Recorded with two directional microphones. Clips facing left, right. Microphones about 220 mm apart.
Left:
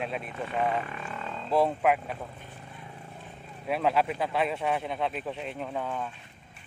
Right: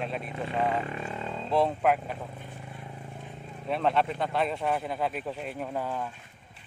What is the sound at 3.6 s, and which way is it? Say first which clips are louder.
Speech: even; 5° left (ahead or behind).